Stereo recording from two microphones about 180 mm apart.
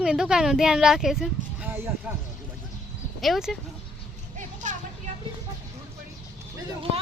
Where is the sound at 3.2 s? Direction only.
Centre (ahead or behind).